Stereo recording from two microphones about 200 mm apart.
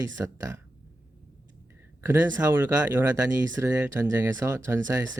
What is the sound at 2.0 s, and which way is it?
Speech, 15° right (ahead or behind).